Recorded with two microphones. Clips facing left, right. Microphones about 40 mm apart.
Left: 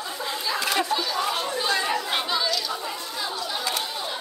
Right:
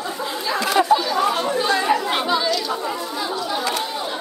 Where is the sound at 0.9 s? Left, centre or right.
Centre.